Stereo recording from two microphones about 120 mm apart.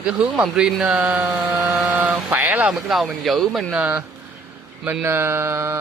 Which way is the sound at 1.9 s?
15° right (ahead or behind).